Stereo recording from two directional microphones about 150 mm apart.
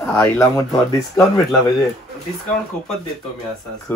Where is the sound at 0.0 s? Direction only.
20° left (ahead or behind).